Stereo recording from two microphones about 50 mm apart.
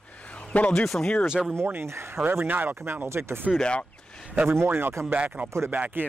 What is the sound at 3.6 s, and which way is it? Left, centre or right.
Speech, left.